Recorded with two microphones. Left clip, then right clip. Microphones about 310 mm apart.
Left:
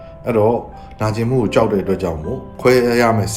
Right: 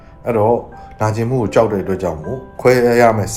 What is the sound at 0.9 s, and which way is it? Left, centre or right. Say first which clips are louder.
Speech: right 1 dB; centre.